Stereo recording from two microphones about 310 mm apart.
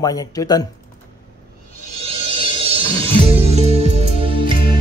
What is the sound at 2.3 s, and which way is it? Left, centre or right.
Music, centre.